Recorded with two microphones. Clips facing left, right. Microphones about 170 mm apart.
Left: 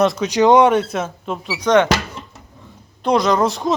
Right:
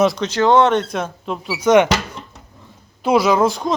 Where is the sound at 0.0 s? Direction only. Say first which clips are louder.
Even; centre (ahead or behind).